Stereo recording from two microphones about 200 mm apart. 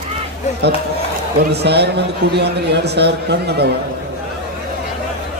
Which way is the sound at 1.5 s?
55° right (ahead or behind).